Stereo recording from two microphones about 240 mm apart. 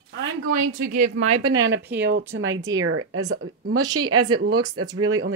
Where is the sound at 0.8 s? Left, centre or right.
Right.